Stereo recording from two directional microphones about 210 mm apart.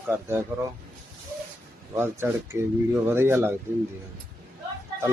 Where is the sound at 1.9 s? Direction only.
10° right (ahead or behind).